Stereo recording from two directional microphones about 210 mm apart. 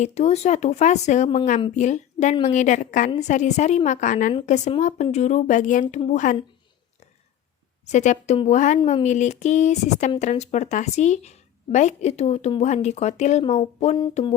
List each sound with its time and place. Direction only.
0.0 s a woman's voice: 30° left (ahead or behind)
7.9 s a woman's voice: 35° left (ahead or behind)
13.4 s a sound: 25° left (ahead or behind)